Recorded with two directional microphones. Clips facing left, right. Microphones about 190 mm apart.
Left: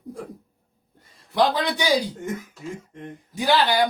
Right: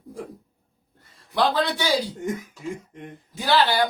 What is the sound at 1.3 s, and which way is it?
Speech, 15° left (ahead or behind).